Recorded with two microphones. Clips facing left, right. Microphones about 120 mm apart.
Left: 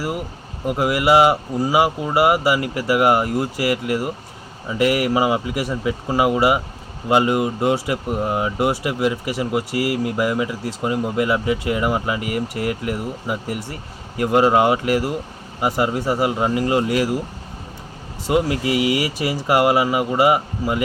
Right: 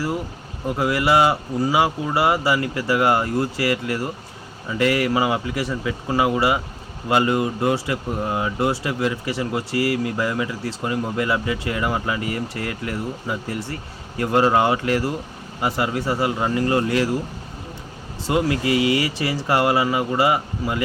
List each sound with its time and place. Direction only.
0.7 s speech: 15° left (ahead or behind)
18.3 s speech: 20° left (ahead or behind)